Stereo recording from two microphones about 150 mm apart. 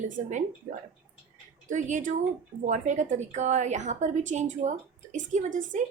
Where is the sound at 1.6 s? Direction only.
55° right (ahead or behind).